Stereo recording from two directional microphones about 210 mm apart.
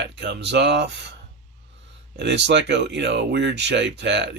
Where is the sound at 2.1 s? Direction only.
55° right (ahead or behind).